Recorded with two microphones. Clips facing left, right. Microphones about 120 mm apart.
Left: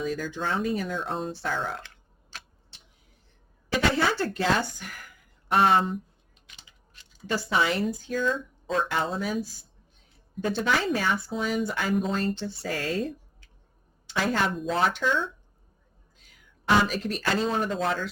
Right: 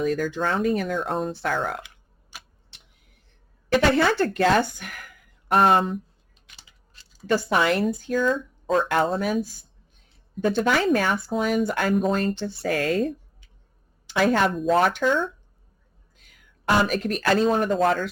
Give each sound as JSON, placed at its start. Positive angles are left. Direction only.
{"t": 0.0, "sound": "speech", "side_deg": -60}
{"t": 1.8, "sound": "tick", "side_deg": -15}
{"t": 2.6, "sound": "a sound", "side_deg": -60}
{"t": 3.7, "sound": "a woman's voice", "side_deg": -55}
{"t": 7.3, "sound": "speech", "side_deg": -55}
{"t": 16.1, "sound": "speech", "side_deg": -60}